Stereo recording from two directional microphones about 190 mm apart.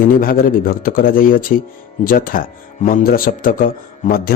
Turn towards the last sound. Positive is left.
turn(degrees=50)  # may be behind; listen again after turning